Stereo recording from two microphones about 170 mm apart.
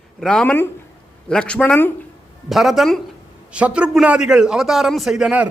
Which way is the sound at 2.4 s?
Centre (ahead or behind).